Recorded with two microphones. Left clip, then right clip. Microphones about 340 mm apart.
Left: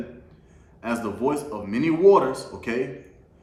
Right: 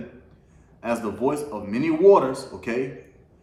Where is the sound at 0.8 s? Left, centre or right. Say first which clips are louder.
Right 1 dB; centre.